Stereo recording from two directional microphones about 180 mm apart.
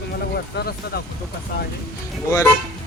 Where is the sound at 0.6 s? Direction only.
60° left (ahead or behind).